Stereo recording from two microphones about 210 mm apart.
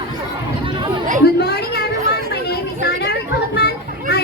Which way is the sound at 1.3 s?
50° left (ahead or behind).